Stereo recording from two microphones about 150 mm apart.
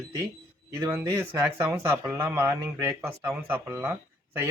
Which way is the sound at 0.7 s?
15° right (ahead or behind).